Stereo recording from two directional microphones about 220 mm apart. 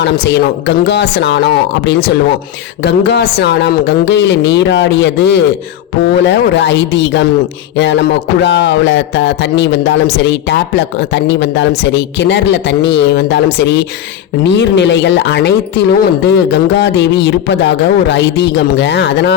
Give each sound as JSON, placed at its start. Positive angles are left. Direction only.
{"t": 0.0, "sound": "speech", "side_deg": 50}